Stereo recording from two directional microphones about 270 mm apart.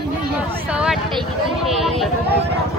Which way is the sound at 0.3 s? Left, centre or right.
Centre.